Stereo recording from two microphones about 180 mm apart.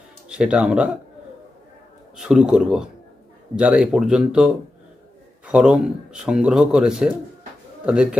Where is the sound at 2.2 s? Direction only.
5° right (ahead or behind).